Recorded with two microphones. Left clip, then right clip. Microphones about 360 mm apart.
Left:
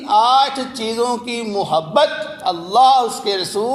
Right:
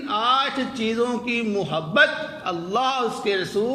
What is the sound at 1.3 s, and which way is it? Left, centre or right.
Speech, left.